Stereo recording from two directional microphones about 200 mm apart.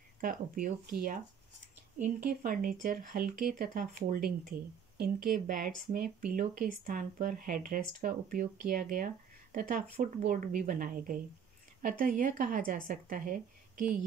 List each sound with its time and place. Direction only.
0.2 s speech: 45° right (ahead or behind)
2.2 s a woman's voice: 45° right (ahead or behind)